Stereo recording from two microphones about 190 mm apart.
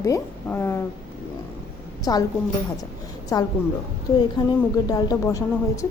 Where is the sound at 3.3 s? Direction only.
20° left (ahead or behind).